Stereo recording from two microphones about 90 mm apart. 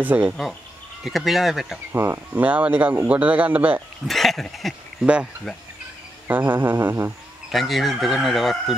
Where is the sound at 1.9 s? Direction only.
25° right (ahead or behind).